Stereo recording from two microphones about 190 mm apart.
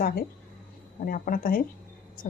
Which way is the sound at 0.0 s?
55° left (ahead or behind).